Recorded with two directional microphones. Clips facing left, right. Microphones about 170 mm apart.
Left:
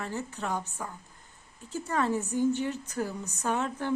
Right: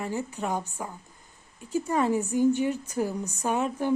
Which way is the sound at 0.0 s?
10° right (ahead or behind).